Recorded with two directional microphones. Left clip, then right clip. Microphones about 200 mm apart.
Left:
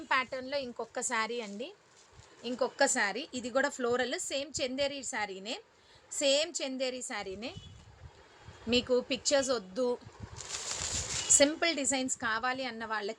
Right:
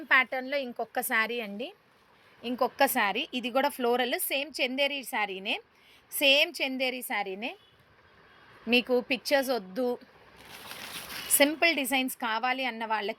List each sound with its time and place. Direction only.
0.1 s a woman's voice: 15° right (ahead or behind)
8.7 s a woman's voice: 10° right (ahead or behind)
11.3 s a woman's voice: 10° right (ahead or behind)